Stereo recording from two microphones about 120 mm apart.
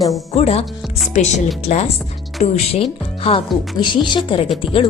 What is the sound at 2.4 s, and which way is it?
Speech, 90° left.